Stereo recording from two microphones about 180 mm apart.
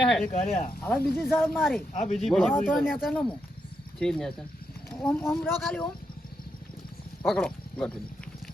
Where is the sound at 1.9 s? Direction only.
40° left (ahead or behind).